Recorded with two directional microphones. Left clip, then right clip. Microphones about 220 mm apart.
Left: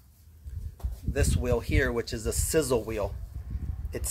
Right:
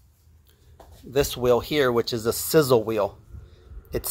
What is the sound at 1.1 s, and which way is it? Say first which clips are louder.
Speech: right 8 dB; 20° right (ahead or behind).